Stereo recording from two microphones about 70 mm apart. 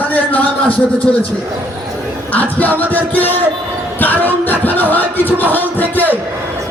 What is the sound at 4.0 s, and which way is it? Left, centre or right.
Speech, left.